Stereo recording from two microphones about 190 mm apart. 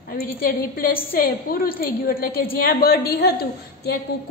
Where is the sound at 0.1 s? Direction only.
50° left (ahead or behind).